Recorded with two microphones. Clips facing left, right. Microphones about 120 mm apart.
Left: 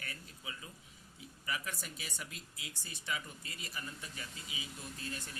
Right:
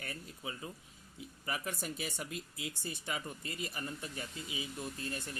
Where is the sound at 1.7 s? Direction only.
45° right (ahead or behind).